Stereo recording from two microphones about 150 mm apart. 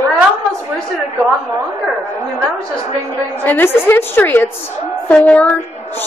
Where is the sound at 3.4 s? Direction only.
15° left (ahead or behind).